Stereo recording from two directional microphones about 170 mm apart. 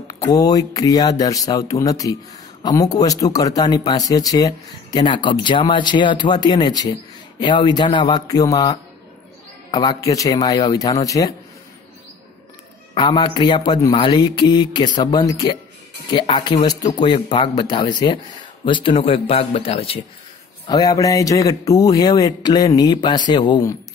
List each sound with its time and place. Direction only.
0.1 s speech: 20° left (ahead or behind)
12.9 s speech: 30° left (ahead or behind)
20.6 s speech: 20° left (ahead or behind)